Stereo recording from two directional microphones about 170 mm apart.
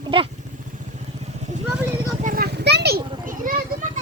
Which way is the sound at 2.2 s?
60° right (ahead or behind).